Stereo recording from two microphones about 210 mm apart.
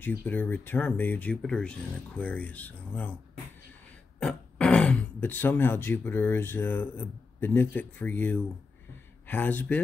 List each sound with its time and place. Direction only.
0.2 s speech: 10° left (ahead or behind)
4.2 s speech: 5° left (ahead or behind)